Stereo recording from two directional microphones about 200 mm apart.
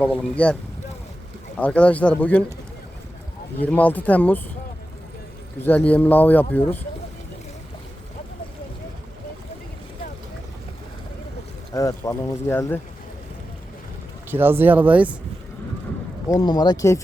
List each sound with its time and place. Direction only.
0.0 s speech: 5° left (ahead or behind)
1.5 s speech: 5° left (ahead or behind)
3.6 s speech: 10° left (ahead or behind)
5.5 s speech: 10° left (ahead or behind)
11.7 s speech: 15° left (ahead or behind)
14.3 s speech: 10° right (ahead or behind)
16.3 s speech: 20° left (ahead or behind)